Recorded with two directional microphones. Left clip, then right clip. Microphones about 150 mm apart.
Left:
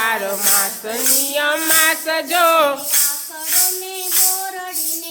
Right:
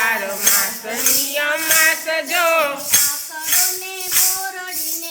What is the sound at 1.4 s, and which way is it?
Music, 45° left (ahead or behind).